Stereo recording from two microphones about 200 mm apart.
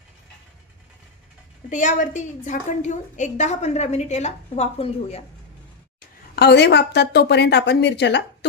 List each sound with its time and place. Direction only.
1.7 s a woman's voice: 40° left (ahead or behind)
6.3 s a woman's voice: 55° left (ahead or behind)